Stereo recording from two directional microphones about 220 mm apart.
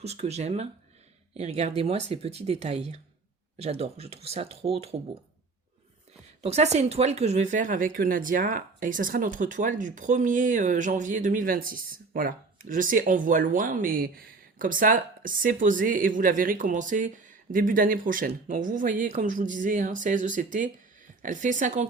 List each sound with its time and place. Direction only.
0.0 s speech: 30° right (ahead or behind)
6.4 s a woman's voice: 30° right (ahead or behind)